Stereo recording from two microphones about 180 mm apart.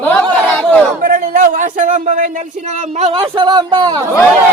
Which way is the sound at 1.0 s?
50° right (ahead or behind).